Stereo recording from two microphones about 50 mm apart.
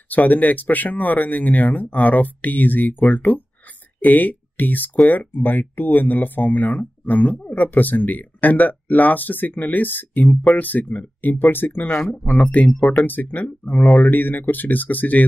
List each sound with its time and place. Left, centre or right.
0.1 s speech: left